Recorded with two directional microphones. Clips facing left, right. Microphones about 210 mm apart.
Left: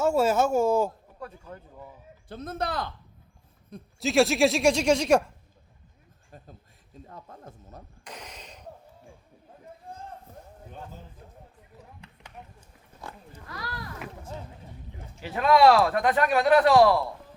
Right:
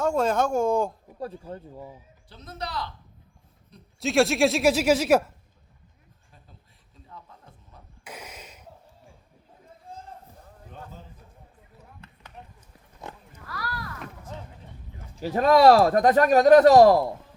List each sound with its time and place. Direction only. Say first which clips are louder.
0.0 s speech: left 1 dB; 5° left (ahead or behind)
1.2 s speech: right 6 dB; 30° right (ahead or behind)
2.3 s speech: left 4 dB; 50° left (ahead or behind)
4.0 s speech: even; centre (ahead or behind)
6.3 s speech: left 8 dB; 45° left (ahead or behind)
8.0 s a sound: right 3 dB; 5° right (ahead or behind)
11.9 s a sound: even; 15° left (ahead or behind)
13.3 s a sound: right 3 dB; 20° left (ahead or behind)
15.1 s speech: right 3 dB; 40° right (ahead or behind)